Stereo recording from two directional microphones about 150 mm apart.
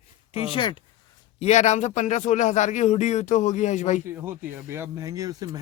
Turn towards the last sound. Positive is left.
turn(degrees=-25)  # may be behind; listen again after turning